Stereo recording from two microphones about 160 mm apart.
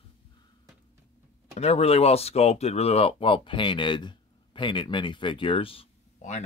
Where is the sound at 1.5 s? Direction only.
40° left (ahead or behind).